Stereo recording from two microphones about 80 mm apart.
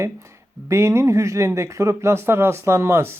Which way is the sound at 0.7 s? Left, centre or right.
Right.